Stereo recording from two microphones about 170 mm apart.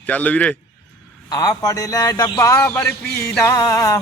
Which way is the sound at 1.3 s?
20° left (ahead or behind).